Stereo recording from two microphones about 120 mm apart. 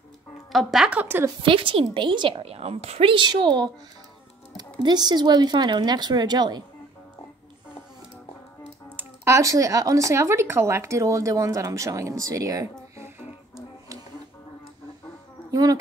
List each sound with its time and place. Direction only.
0.5 s a woman's voice: centre (ahead or behind); by 1.3 s 15° right (ahead or behind)
1.4 s a woman's voice: 45° right (ahead or behind)
4.8 s a woman's voice: 35° right (ahead or behind)
8.8 s speech: 20° right (ahead or behind)
15.5 s a woman's voice: 30° right (ahead or behind)